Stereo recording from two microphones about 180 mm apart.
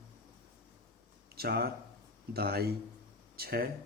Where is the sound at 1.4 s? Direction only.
60° right (ahead or behind).